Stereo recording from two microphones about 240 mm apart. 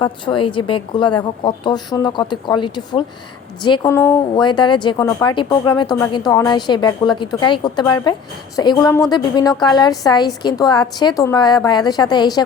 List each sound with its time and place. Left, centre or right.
0.0 s a woman's voice: left